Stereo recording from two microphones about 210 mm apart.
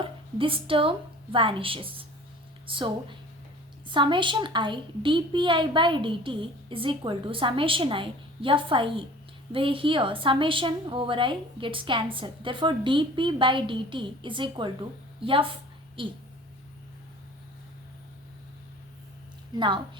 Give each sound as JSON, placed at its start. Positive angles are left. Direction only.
{"t": 0.0, "sound": "a woman's voice", "side_deg": -25}
{"t": 19.5, "sound": "a woman's voice", "side_deg": -20}